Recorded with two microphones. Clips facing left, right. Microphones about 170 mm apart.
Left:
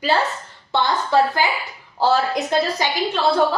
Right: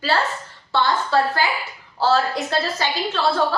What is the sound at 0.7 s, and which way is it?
A woman's voice, 20° left (ahead or behind).